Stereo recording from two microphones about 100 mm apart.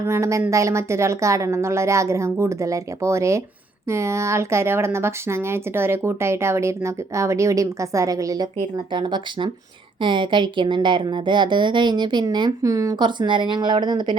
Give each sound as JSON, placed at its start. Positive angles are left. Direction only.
{"t": 0.0, "sound": "a woman's voice", "side_deg": -30}
{"t": 8.5, "sound": "speech", "side_deg": -50}
{"t": 12.5, "sound": "a woman's voice", "side_deg": -35}
{"t": 13.0, "sound": "speech", "side_deg": -50}